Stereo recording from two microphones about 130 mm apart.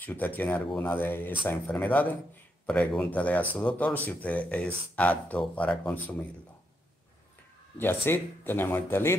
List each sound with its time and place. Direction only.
0.0 s speech: 15° left (ahead or behind)
7.7 s speech: 15° left (ahead or behind)